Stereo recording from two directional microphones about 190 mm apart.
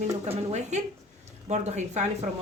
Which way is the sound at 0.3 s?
35° right (ahead or behind).